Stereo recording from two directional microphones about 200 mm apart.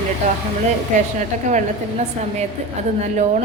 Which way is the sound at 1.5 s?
35° right (ahead or behind).